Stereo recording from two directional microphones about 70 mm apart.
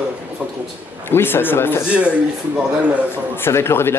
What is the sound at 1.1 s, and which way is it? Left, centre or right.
Speech, left.